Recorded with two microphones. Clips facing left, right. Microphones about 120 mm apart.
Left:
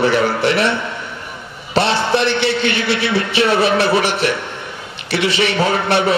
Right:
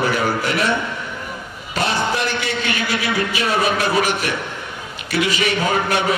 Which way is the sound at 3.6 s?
70° left (ahead or behind).